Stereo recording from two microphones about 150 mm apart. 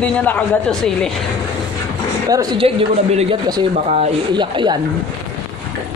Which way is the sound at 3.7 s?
55° right (ahead or behind).